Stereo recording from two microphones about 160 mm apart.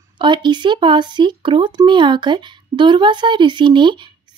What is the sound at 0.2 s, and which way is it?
Speech, 30° right (ahead or behind).